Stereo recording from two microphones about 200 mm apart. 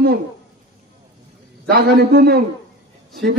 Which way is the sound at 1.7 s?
50° right (ahead or behind).